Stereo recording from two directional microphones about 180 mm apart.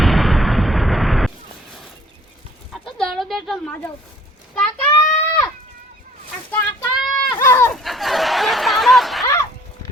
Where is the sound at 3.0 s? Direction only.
Centre (ahead or behind).